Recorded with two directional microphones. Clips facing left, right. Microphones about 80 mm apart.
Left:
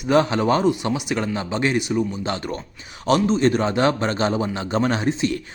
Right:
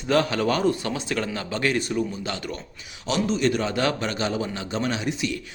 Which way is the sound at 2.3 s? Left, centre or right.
Left.